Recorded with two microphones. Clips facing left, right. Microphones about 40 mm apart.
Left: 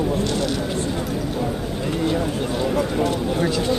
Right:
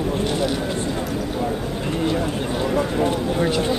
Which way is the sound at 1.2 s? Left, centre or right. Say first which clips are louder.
Right 1 dB; centre.